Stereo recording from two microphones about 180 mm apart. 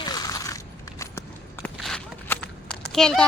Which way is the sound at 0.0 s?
20° left (ahead or behind).